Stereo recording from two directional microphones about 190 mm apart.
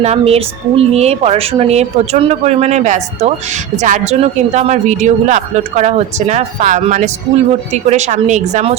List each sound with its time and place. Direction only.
0.0 s speech: 35° right (ahead or behind)